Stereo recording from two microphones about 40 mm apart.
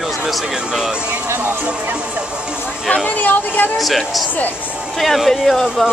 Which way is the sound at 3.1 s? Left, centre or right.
Left.